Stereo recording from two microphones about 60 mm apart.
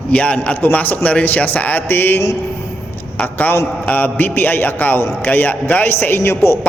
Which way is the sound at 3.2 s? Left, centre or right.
Left.